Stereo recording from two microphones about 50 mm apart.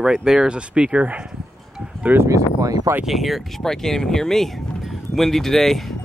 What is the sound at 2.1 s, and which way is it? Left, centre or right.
Speech, right.